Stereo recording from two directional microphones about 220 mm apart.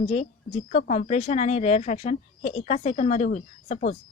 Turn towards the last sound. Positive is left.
turn(degrees=30)  # may be behind; listen again after turning